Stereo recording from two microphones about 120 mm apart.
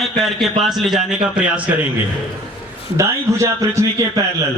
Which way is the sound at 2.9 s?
25° right (ahead or behind).